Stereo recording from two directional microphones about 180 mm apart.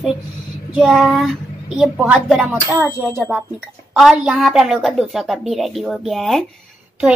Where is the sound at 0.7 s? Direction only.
5° right (ahead or behind).